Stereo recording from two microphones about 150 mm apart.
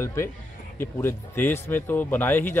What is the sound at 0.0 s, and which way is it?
Speech, 15° left (ahead or behind).